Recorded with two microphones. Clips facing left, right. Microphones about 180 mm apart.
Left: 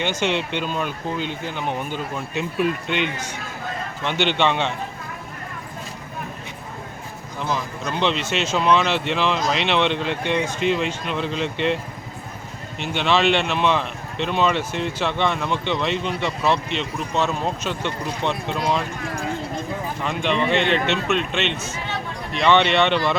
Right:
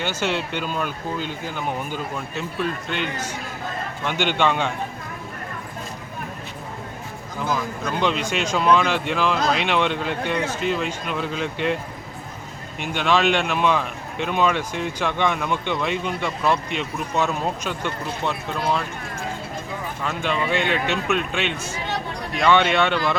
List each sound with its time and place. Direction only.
0.0 s speech: 5° right (ahead or behind)
0.9 s speech: 45° right (ahead or behind)
1.5 s a man's voice: 5° right (ahead or behind)
2.1 s a man's voice: 5° left (ahead or behind)
4.0 s speech: 10° right (ahead or behind)
7.5 s a man's voice: 10° right (ahead or behind)
13.0 s a man's voice: 10° right (ahead or behind)
20.1 s a man's voice: 5° right (ahead or behind)